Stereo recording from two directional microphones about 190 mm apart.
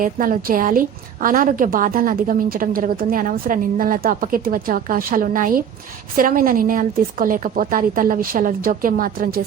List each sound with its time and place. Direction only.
0.0 s a woman's voice: 45° right (ahead or behind)